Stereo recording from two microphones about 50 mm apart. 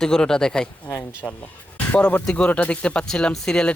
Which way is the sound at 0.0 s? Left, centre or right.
Centre.